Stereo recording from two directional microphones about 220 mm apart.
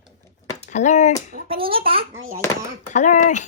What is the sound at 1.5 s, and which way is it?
Speech, 25° right (ahead or behind).